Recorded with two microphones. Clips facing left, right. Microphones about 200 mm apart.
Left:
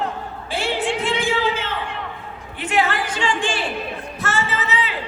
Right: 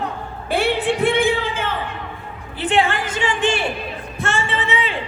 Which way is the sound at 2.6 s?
30° right (ahead or behind).